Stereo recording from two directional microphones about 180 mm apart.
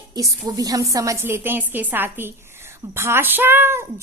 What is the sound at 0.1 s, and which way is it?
A woman's voice, 20° right (ahead or behind).